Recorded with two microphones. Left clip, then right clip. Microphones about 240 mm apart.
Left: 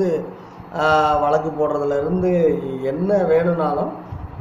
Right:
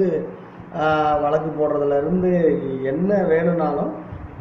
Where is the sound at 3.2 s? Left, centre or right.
Left.